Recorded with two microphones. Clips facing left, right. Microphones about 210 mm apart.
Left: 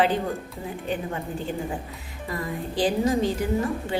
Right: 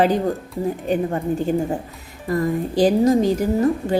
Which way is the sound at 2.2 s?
45° right (ahead or behind).